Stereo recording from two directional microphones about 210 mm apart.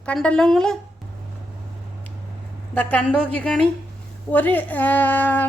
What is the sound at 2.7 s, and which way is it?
A woman's voice, 5° left (ahead or behind).